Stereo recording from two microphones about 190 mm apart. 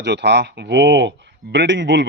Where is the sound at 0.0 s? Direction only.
65° right (ahead or behind).